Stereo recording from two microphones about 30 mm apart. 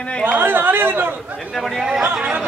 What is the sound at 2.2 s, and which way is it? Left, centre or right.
Speech, right.